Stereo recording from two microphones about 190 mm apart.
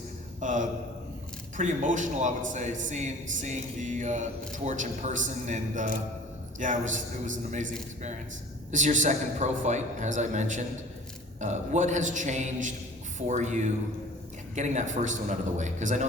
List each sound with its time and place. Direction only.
0.3 s a man's voice: 40° right (ahead or behind)
8.7 s a man's voice: 40° right (ahead or behind)